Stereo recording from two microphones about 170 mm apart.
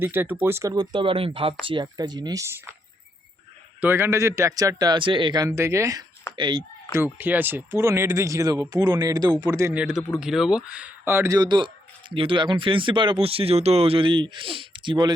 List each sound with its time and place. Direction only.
0.0 s speech: 10° right (ahead or behind)
3.8 s speech: 15° right (ahead or behind); by 6.7 s 30° right (ahead or behind)
6.9 s speech: 10° right (ahead or behind)
10.2 s speech: 5° right (ahead or behind); by 15.1 s 25° right (ahead or behind)